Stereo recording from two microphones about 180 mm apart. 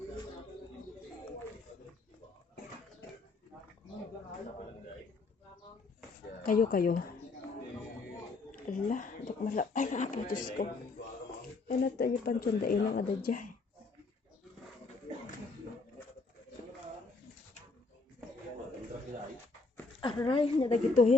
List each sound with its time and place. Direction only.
6.4 s speech: 50° left (ahead or behind)
8.5 s speech: 50° left (ahead or behind)
11.8 s speech: 55° left (ahead or behind)
20.0 s speech: 25° left (ahead or behind)